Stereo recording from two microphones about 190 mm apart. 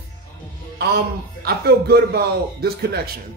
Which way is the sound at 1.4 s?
55° right (ahead or behind).